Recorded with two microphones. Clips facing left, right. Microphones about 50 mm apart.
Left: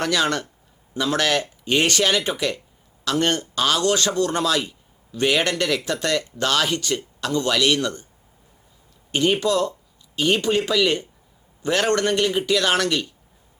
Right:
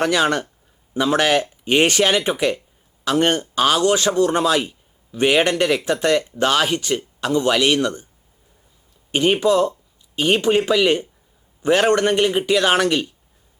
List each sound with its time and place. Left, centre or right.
0.0 s speech: centre
9.1 s speech: right